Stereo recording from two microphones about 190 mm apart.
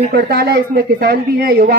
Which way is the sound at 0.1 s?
55° right (ahead or behind).